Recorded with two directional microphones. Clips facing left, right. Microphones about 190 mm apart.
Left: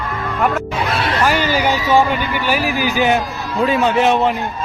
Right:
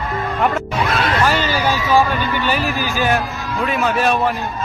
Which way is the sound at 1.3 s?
15° left (ahead or behind).